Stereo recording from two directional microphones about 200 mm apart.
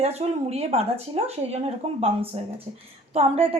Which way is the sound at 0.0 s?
30° right (ahead or behind).